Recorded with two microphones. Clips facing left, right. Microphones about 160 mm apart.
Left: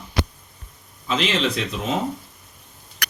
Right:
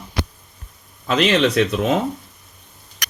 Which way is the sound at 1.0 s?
65° right (ahead or behind).